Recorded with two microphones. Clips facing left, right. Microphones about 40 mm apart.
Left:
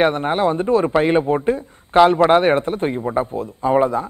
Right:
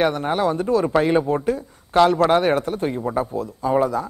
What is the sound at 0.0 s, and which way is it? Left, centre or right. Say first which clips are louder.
A man's voice: left 3 dB; left.